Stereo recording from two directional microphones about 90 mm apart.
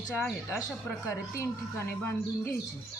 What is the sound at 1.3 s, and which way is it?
Speech, 35° left (ahead or behind).